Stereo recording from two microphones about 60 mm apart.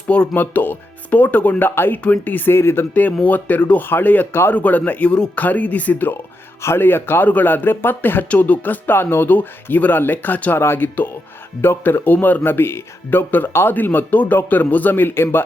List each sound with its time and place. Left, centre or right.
0.3 s speech: left
2.9 s speech: left
5.1 s speech: centre
5.4 s speech: left
6.6 s speech: left